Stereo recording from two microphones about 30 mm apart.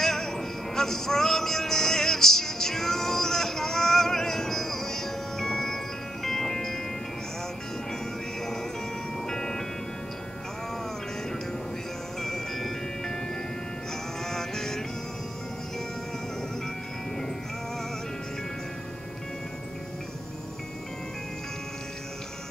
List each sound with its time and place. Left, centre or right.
0.0 s music: centre
9.3 s music: centre
12.2 s music: centre
14.2 s music: centre